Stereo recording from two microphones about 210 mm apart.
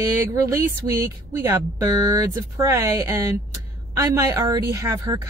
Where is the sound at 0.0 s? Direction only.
15° right (ahead or behind).